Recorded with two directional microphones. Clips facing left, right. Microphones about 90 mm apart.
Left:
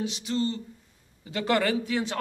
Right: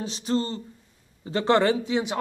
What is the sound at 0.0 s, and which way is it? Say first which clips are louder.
Speech: right 2 dB; 35° right (ahead or behind).